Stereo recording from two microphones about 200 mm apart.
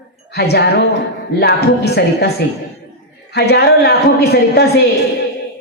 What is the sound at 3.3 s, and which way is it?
A woman's voice, 55° left (ahead or behind).